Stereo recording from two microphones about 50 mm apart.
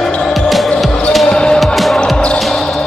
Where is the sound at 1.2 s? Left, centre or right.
Centre.